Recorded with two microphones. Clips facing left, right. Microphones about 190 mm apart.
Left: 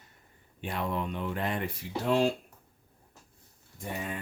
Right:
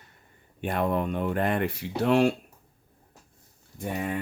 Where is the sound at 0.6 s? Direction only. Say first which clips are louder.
Right 6 dB; 55° right (ahead or behind).